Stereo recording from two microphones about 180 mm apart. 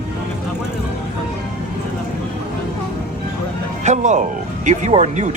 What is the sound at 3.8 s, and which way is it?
Music, 40° right (ahead or behind).